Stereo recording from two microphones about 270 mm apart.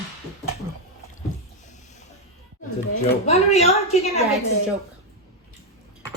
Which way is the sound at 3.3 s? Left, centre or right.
Left.